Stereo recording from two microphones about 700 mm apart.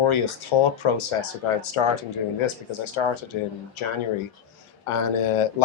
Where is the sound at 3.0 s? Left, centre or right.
Left.